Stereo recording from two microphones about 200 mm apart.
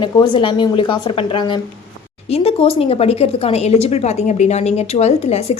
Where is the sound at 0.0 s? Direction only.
25° left (ahead or behind).